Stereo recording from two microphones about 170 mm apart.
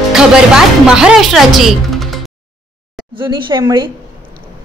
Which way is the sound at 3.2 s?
25° right (ahead or behind).